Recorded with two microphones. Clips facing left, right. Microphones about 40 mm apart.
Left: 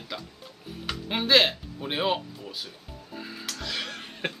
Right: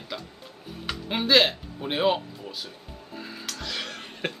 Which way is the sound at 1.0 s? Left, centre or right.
Centre.